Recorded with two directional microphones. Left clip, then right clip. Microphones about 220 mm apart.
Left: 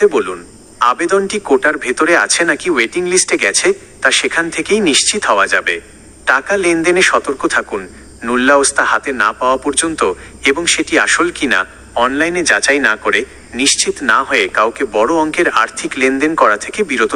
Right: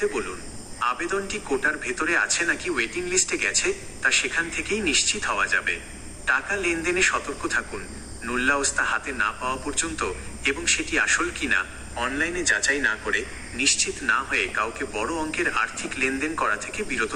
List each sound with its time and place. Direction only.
0.0 s a man's voice: 40° left (ahead or behind)